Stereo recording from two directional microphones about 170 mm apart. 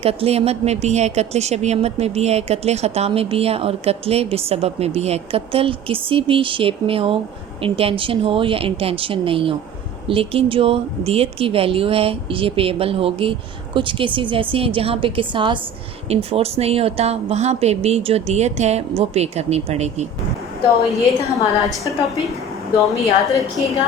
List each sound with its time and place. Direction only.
0.0 s a woman's voice: 35° right (ahead or behind)
20.8 s a woman's voice: centre (ahead or behind)